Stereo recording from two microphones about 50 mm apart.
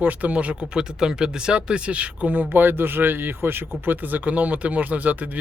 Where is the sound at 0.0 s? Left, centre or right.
Right.